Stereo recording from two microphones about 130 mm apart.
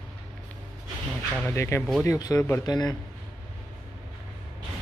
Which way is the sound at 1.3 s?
15° left (ahead or behind).